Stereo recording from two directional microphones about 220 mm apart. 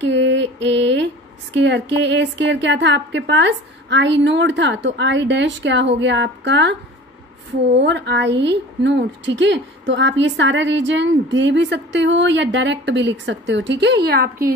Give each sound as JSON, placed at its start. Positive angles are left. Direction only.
{"t": 0.0, "sound": "mantra", "side_deg": -55}
{"t": 1.5, "sound": "a woman's voice", "side_deg": -55}
{"t": 7.8, "sound": "a woman's voice", "side_deg": -55}